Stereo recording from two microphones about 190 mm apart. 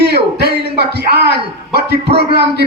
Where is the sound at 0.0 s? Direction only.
60° right (ahead or behind).